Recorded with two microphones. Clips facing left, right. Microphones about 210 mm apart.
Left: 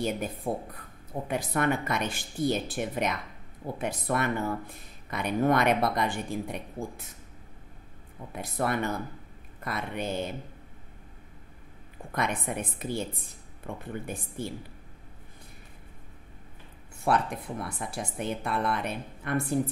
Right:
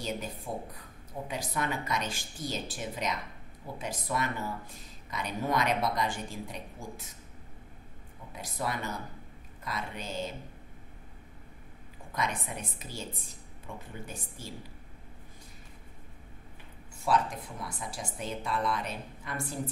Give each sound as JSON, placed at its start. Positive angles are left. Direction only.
{"t": 0.0, "sound": "speech", "side_deg": 55}
{"t": 8.4, "sound": "speech", "side_deg": 60}
{"t": 12.1, "sound": "speech", "side_deg": 55}
{"t": 17.0, "sound": "speech", "side_deg": 60}